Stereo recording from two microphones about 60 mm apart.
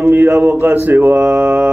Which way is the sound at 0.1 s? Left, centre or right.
Right.